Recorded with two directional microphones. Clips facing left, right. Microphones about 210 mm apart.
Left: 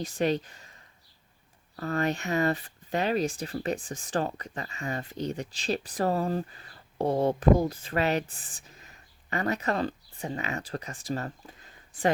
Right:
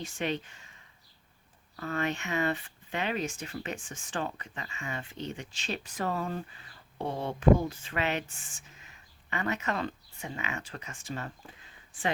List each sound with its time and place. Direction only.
0.0 s speech: 40° left (ahead or behind)